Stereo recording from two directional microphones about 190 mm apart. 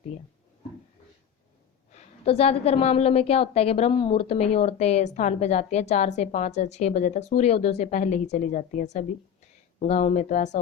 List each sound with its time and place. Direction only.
1.9 s a woman's voice: 35° left (ahead or behind)